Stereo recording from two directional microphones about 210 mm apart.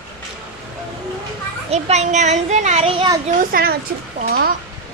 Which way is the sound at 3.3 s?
45° right (ahead or behind).